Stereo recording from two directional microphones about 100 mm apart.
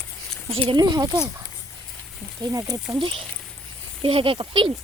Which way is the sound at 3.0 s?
65° right (ahead or behind).